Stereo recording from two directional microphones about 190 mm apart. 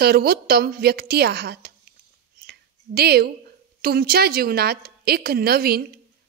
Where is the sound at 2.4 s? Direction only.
55° right (ahead or behind).